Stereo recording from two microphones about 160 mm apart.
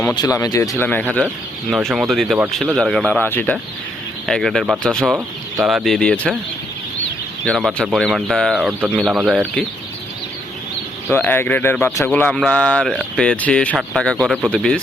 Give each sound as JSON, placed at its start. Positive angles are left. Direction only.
{"t": 0.2, "sound": "speech", "side_deg": 20}
{"t": 0.9, "sound": "speech", "side_deg": 10}
{"t": 1.7, "sound": "speech", "side_deg": 0}
{"t": 7.4, "sound": "speech", "side_deg": 0}
{"t": 11.1, "sound": "speech", "side_deg": 15}